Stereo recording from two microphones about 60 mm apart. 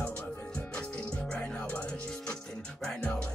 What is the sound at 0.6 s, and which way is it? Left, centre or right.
Music, centre.